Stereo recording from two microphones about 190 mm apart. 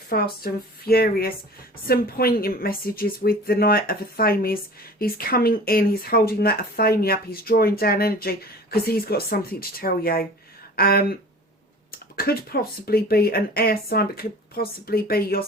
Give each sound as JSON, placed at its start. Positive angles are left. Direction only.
{"t": 0.1, "sound": "speech", "side_deg": 50}